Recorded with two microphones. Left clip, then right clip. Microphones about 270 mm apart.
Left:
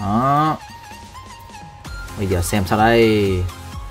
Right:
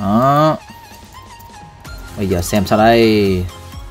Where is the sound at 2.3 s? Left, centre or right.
Centre.